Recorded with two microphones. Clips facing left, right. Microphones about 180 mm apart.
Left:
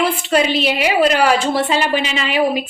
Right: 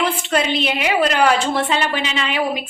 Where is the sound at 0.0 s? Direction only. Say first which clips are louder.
Left 3 dB; 10° left (ahead or behind).